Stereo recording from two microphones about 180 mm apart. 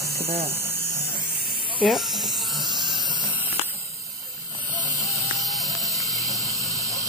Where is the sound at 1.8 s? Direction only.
Centre (ahead or behind).